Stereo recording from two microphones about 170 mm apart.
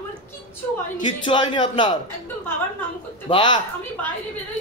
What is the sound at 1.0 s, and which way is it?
Speech, 25° left (ahead or behind).